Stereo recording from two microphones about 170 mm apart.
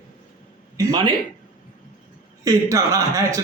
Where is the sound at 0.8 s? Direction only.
20° right (ahead or behind).